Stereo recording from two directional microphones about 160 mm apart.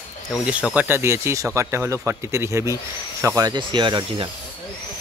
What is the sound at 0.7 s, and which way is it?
Speech, 15° right (ahead or behind).